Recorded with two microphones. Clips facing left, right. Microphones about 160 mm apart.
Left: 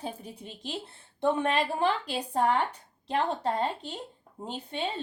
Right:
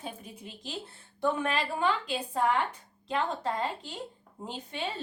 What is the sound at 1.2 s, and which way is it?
A woman's voice, 30° left (ahead or behind).